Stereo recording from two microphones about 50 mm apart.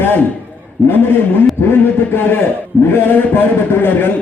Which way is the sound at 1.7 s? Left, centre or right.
Left.